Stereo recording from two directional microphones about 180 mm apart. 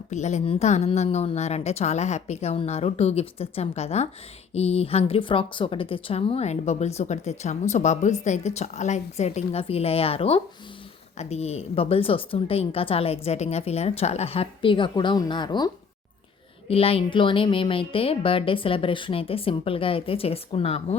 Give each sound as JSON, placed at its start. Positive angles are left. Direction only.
{"t": 0.1, "sound": "speech", "side_deg": 40}